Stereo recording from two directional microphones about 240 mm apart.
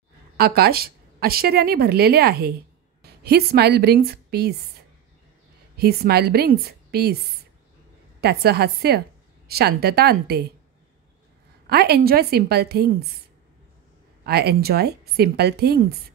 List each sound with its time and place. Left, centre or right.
0.4 s a woman's voice: right
5.8 s a woman's voice: right
8.2 s a woman's voice: right
11.7 s a woman's voice: right
14.2 s a woman's voice: right